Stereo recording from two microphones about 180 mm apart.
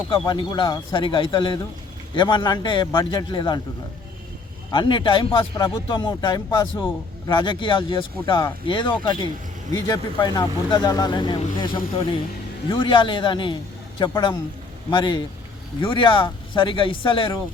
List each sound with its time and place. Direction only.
0.1 s speech: 25° left (ahead or behind)
4.7 s speech: 25° left (ahead or behind)